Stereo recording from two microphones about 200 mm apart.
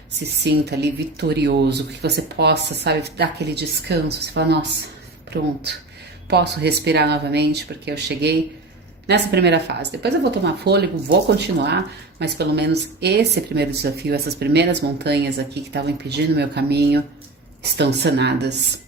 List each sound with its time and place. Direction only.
0.4 s speech: 55° right (ahead or behind)